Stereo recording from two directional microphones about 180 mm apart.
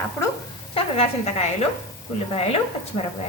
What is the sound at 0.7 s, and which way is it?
Speech, 35° left (ahead or behind).